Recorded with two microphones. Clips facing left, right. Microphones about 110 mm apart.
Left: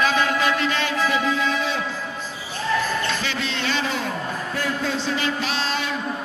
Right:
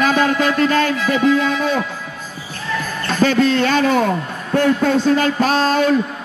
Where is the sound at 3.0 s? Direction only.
45° right (ahead or behind).